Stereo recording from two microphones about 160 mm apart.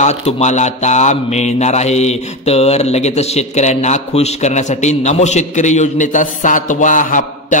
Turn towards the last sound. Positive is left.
turn(degrees=55)  # may be behind; listen again after turning